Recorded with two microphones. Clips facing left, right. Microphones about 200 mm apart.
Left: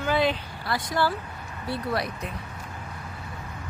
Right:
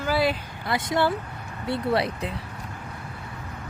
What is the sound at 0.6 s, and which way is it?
Speech, 25° right (ahead or behind).